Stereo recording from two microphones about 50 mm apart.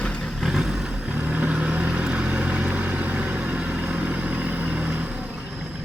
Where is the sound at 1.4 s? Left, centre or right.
Right.